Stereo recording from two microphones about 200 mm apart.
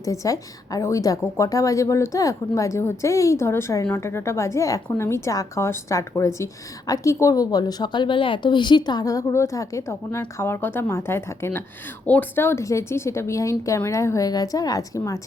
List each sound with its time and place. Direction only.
0.0 s a woman's voice: 15° left (ahead or behind)